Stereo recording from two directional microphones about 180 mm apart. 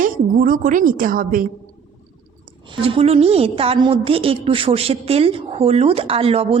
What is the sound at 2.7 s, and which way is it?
A woman's voice, 30° right (ahead or behind).